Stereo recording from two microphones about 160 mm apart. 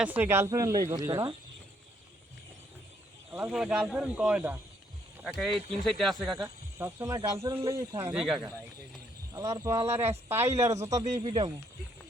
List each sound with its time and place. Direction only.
0.0 s speech: 10° right (ahead or behind)
3.3 s speech: 5° right (ahead or behind)
6.7 s speech: 15° right (ahead or behind)
8.1 s speech: 5° right (ahead or behind)
9.3 s speech: 20° right (ahead or behind)